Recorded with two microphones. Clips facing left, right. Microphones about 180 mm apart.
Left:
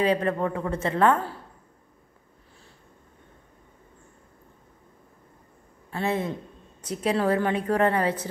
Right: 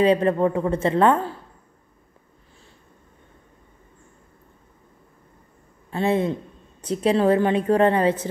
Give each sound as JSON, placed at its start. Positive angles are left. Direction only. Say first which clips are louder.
{"t": 0.0, "sound": "a woman's voice", "louder": "right 6 dB", "side_deg": -30}
{"t": 5.9, "sound": "a man's voice", "louder": "right 6 dB", "side_deg": -25}